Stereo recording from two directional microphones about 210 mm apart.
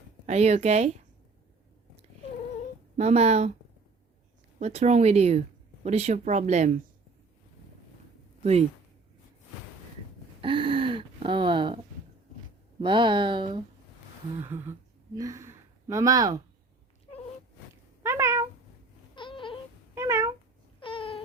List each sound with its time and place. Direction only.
0.3 s speech: 30° right (ahead or behind)
3.0 s speech: 30° right (ahead or behind)
4.6 s speech: 30° right (ahead or behind)
10.4 s a sound: 25° right (ahead or behind)
12.8 s speech: 20° right (ahead or behind)
14.5 s speech: 15° right (ahead or behind)
18.0 s cat: 10° right (ahead or behind)
19.1 s a sound: 25° left (ahead or behind)
20.0 s cat: 15° right (ahead or behind)
20.8 s a sound: 25° left (ahead or behind)